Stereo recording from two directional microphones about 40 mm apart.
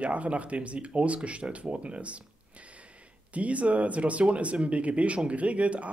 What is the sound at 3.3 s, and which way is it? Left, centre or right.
Speech, right.